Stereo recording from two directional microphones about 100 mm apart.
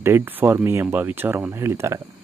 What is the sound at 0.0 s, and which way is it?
Speech, 20° right (ahead or behind).